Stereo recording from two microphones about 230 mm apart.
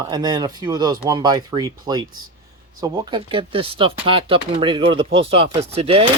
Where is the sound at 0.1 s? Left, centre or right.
Centre.